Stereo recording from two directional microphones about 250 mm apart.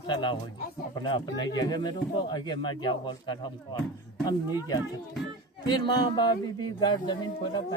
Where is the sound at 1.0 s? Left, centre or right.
Centre.